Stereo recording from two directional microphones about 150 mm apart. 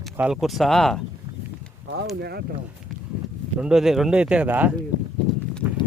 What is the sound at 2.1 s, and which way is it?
Speech, 90° right.